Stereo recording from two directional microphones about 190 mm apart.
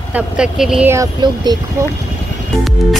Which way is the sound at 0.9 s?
20° right (ahead or behind).